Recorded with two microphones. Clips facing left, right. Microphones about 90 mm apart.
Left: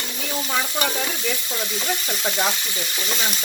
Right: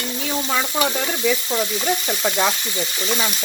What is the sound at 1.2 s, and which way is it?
Sizzle, 80° right.